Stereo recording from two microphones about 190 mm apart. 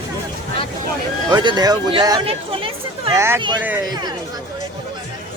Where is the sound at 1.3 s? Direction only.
25° right (ahead or behind).